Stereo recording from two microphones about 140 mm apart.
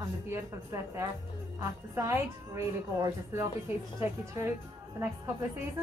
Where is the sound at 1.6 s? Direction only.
20° right (ahead or behind).